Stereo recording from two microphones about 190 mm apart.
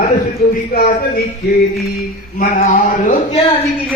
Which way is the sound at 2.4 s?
45° left (ahead or behind).